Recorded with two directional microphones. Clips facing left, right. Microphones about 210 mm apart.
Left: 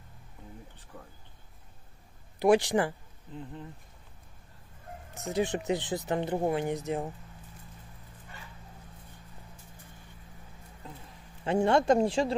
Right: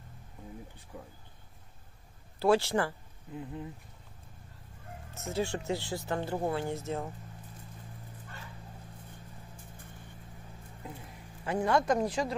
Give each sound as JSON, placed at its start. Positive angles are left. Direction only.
{"t": 0.9, "sound": "speech", "side_deg": -10}
{"t": 2.3, "sound": "speech", "side_deg": 15}
{"t": 5.1, "sound": "speech", "side_deg": 15}
{"t": 11.4, "sound": "speech", "side_deg": 25}